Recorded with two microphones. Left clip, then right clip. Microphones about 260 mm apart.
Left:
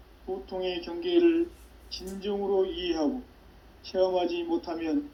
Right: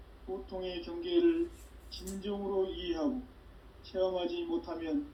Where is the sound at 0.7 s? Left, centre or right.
Left.